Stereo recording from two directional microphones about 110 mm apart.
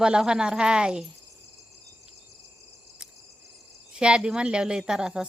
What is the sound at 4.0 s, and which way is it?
A woman's voice, 10° right (ahead or behind).